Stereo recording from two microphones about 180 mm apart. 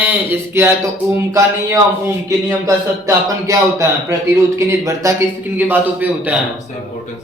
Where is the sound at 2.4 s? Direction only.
15° right (ahead or behind).